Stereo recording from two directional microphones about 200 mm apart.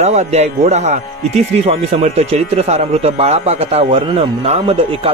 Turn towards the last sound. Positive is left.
turn(degrees=-30)  # may be behind; listen again after turning